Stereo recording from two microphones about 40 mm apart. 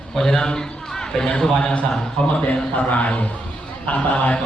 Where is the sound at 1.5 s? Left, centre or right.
Left.